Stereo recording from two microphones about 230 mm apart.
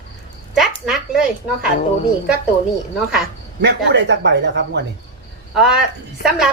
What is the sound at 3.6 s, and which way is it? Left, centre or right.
Speech, right.